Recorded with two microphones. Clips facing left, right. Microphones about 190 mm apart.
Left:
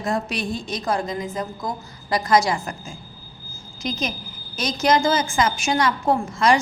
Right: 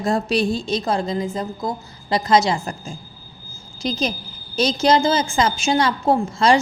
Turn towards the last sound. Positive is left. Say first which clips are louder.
# right 2 dB
turn(degrees=-30)  # may be behind; listen again after turning